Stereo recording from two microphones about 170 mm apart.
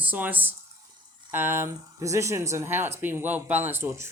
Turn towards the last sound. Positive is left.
turn(degrees=-15)  # may be behind; listen again after turning